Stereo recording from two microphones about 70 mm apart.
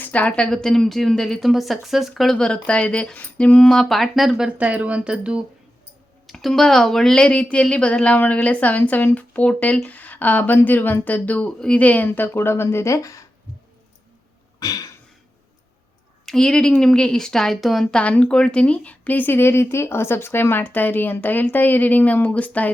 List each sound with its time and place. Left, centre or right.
0.0 s a woman's voice: left; by 2.5 s centre
2.5 s a woman's voice: centre
4.5 s speech: right
6.2 s a woman's voice: centre; by 13.2 s left
14.6 s a sound: left
16.2 s a woman's voice: centre
17.9 s speech: centre